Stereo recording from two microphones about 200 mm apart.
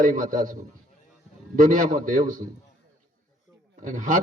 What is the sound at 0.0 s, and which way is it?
Speech, 40° right (ahead or behind).